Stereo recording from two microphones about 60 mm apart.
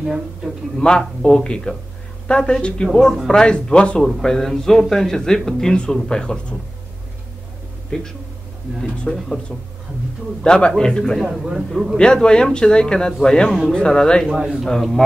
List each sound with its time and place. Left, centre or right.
0.7 s speech: centre
7.9 s speech: centre
10.4 s speech: centre
11.2 s a man's voice: centre
12.0 s speech: centre
14.3 s a man's voice: centre
14.6 s a man's voice: centre